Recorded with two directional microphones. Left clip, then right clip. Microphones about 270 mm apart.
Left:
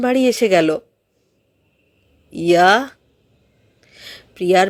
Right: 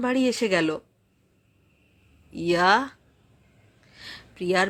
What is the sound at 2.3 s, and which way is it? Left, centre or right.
Speech, centre.